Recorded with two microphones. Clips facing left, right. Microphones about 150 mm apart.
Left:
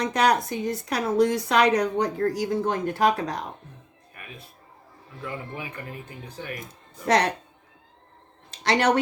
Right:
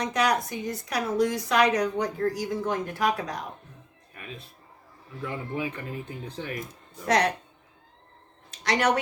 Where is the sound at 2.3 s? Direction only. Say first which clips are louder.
Left 3 dB; 30° left (ahead or behind).